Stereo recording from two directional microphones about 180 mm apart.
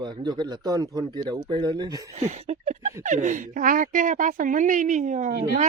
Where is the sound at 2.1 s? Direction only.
40° right (ahead or behind).